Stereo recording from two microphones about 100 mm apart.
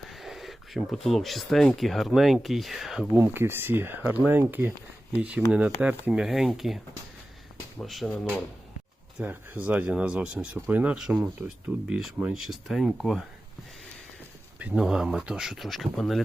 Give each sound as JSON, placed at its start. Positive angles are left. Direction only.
{"t": 0.1, "sound": "speech", "side_deg": 0}
{"t": 3.2, "sound": "speech", "side_deg": -25}
{"t": 7.8, "sound": "speech", "side_deg": 0}
{"t": 9.1, "sound": "speech", "side_deg": -20}
{"t": 14.6, "sound": "speech", "side_deg": -5}